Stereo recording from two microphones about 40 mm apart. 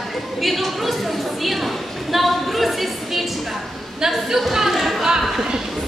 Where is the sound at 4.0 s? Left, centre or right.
Centre.